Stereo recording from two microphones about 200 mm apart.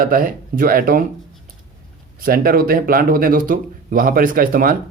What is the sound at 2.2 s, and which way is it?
Speech, 45° right (ahead or behind).